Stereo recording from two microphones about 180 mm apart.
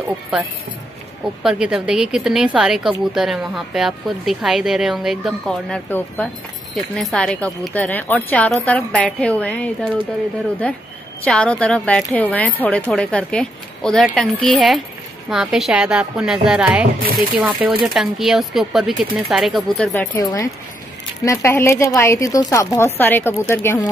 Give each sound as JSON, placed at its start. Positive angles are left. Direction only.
{"t": 1.4, "sound": "speech", "side_deg": -5}
{"t": 19.9, "sound": "speech", "side_deg": 15}